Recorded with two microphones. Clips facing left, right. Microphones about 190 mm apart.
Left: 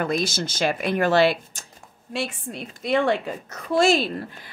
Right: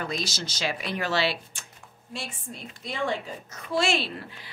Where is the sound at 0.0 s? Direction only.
55° left (ahead or behind).